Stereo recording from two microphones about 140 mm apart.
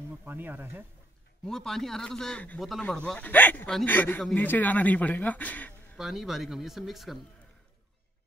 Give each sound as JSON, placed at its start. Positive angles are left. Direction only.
{"t": 0.2, "sound": "speech", "side_deg": -15}
{"t": 1.4, "sound": "a man's voice", "side_deg": 5}
{"t": 5.9, "sound": "a man's voice", "side_deg": -5}